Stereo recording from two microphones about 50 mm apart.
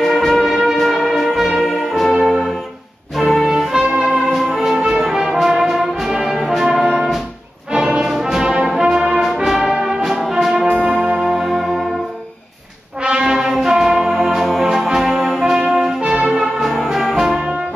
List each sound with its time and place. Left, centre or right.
0.0 s music: centre
7.7 s brass instrument: centre
10.9 s music: right
11.1 s music: centre
13.0 s brass instrument: centre
16.3 s music: centre